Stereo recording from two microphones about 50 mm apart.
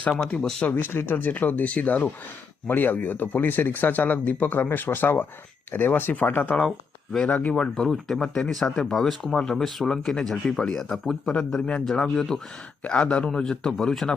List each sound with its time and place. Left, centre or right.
0.7 s speech: left
6.6 s speech: centre
7.2 s speech: left
7.5 s speech: centre
11.6 s speech: centre
12.8 s speech: left; by 14.1 s centre